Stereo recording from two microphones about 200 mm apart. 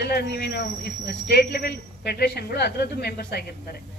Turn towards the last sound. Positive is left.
turn(degrees=50)  # may be behind; listen again after turning